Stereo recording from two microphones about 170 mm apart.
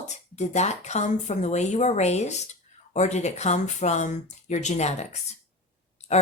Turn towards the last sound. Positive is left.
turn(degrees=40)  # may be behind; listen again after turning